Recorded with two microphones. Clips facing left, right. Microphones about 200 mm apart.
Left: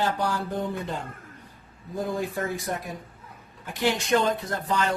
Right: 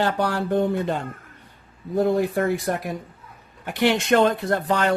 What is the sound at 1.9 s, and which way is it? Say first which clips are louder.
Speech: right 8 dB; 65° right (ahead or behind).